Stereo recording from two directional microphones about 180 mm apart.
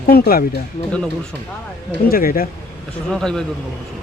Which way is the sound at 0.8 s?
40° left (ahead or behind).